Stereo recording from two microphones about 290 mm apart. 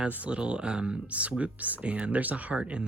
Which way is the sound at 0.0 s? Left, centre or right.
Centre.